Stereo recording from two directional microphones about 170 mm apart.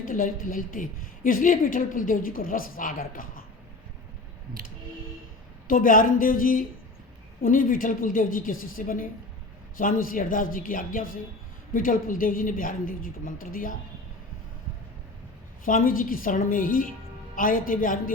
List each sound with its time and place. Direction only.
0.0 s a woman's voice: 55° left (ahead or behind)
5.6 s a woman's voice: 55° left (ahead or behind)
15.6 s a woman's voice: 55° left (ahead or behind)